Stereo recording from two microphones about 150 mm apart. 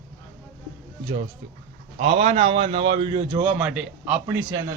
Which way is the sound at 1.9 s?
45° right (ahead or behind).